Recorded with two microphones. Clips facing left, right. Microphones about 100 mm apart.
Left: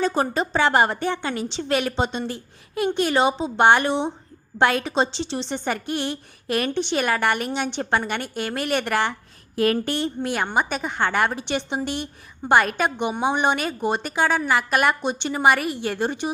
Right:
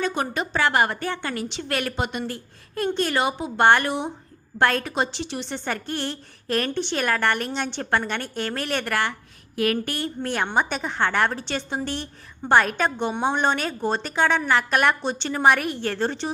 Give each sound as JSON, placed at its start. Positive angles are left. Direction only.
{"t": 0.0, "sound": "a woman's voice", "side_deg": 35}
{"t": 10.2, "sound": "a woman's voice", "side_deg": 10}
{"t": 15.0, "sound": "a woman's voice", "side_deg": 15}